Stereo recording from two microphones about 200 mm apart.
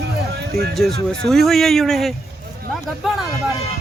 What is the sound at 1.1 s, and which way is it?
Speech, centre (ahead or behind).